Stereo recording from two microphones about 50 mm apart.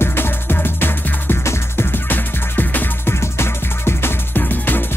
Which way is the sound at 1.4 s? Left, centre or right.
Left.